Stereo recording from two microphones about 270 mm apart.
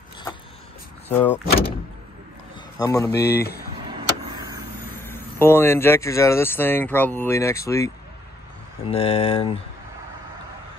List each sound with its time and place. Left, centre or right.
1.0 s speech: centre
2.8 s speech: centre
3.1 s speech: left
3.8 s vehicle: centre
4.8 s speech: centre